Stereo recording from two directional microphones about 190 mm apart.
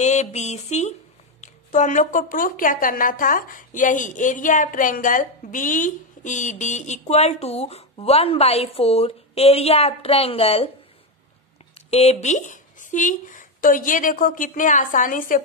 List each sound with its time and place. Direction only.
0.0 s a woman's voice: 40° left (ahead or behind)
11.7 s speech: 35° left (ahead or behind)